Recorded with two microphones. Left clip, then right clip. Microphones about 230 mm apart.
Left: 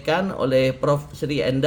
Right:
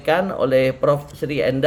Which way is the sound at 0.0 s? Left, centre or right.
Left.